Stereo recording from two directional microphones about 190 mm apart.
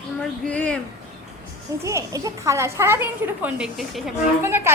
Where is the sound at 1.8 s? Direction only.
15° right (ahead or behind); by 4.1 s centre (ahead or behind).